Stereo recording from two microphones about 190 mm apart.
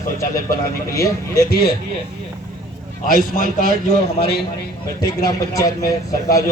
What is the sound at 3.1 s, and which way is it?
Speech, 45° left (ahead or behind).